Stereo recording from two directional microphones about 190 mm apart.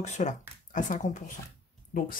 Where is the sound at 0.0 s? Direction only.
40° left (ahead or behind).